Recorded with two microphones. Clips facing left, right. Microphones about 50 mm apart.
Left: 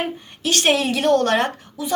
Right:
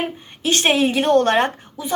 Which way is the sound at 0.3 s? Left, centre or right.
Right.